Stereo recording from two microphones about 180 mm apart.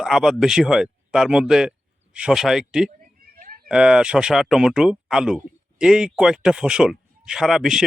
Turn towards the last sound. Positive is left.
turn(degrees=0)  # may be behind; listen again after turning